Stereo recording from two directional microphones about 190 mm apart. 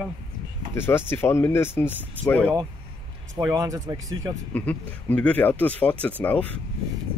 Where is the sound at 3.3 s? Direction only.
15° right (ahead or behind).